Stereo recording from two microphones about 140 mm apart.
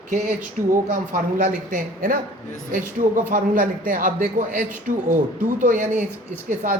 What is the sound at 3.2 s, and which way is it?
A man's voice, 75° right (ahead or behind).